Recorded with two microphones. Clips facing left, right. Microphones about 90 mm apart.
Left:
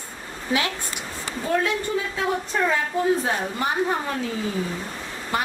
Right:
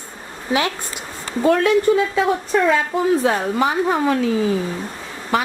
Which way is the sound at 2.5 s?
90° right.